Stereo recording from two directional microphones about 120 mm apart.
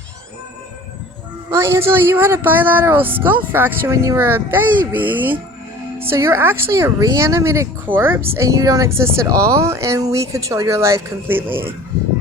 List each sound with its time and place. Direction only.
1.5 s speech: 20° right (ahead or behind)